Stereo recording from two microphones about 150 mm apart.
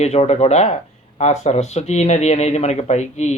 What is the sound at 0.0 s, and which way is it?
Speech, 45° left (ahead or behind).